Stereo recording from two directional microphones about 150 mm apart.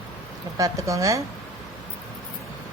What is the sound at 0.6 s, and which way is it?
Speech, 20° right (ahead or behind).